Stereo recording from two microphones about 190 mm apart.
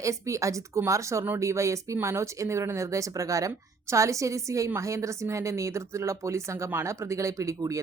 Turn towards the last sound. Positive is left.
turn(degrees=-15)  # may be behind; listen again after turning